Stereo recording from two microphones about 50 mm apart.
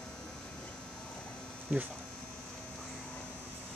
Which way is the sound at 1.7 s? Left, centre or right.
Right.